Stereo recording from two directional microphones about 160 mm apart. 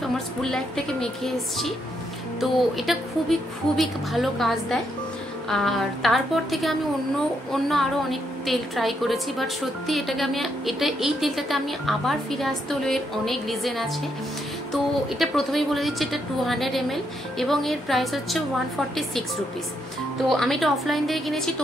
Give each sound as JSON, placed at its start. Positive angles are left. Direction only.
{"t": 0.0, "sound": "a woman's voice", "side_deg": 5}
{"t": 20.2, "sound": "a woman's voice", "side_deg": 0}